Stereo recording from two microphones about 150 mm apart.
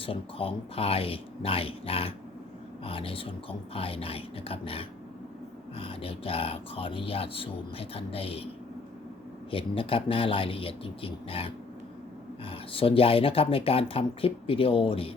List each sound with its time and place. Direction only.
0.0 s speech: 35° left (ahead or behind)
9.5 s speech: 35° left (ahead or behind)